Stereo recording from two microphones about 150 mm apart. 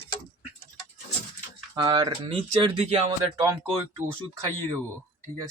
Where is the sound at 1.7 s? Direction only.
25° right (ahead or behind); by 3.1 s 45° right (ahead or behind).